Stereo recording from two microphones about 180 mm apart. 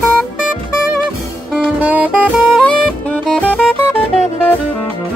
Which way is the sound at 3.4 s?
10° left (ahead or behind).